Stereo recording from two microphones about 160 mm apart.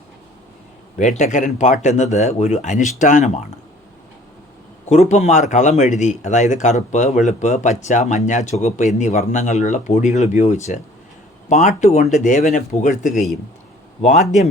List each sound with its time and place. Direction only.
0.9 s speech: 45° left (ahead or behind)
4.9 s speech: 45° left (ahead or behind)